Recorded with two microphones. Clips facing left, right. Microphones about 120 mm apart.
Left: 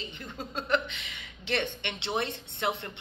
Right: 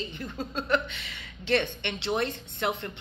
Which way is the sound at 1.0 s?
15° left (ahead or behind).